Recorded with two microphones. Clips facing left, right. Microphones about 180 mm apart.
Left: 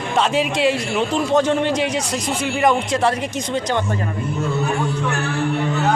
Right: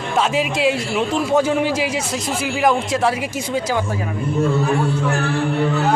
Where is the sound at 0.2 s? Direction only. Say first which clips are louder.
Even; centre (ahead or behind).